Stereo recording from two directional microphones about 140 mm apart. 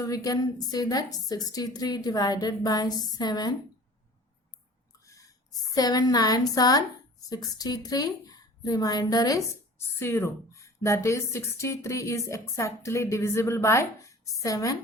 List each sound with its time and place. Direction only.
0.0 s a woman's voice: 25° left (ahead or behind)
5.7 s a woman's voice: 25° left (ahead or behind)